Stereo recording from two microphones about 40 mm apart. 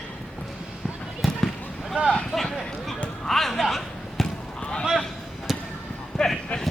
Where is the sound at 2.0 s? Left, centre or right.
Right.